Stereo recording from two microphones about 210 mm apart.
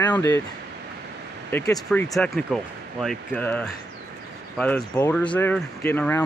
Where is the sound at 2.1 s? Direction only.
Centre (ahead or behind).